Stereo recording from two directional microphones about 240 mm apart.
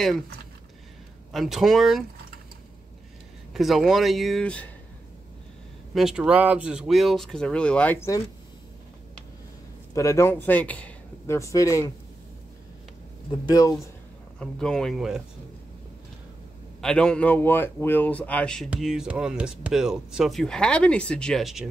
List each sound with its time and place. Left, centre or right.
1.3 s a man's voice: centre
3.5 s a man's voice: centre
5.9 s a man's voice: centre
9.9 s speech: centre
13.5 s speech: centre
14.4 s a man's voice: centre
16.8 s a man's voice: centre